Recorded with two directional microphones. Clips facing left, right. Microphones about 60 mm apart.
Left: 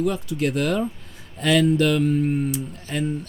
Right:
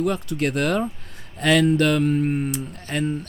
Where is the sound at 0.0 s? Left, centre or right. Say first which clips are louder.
Even; right.